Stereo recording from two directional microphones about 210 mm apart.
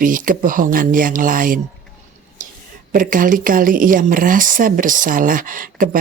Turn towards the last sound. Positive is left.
turn(degrees=-40)  # may be behind; listen again after turning